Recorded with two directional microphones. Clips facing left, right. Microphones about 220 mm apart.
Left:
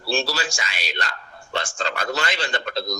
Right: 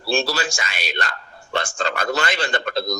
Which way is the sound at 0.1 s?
55° right (ahead or behind).